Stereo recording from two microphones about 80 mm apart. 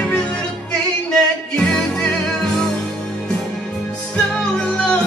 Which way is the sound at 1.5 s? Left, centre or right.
Centre.